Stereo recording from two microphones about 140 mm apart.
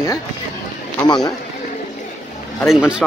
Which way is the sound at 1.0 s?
30° left (ahead or behind).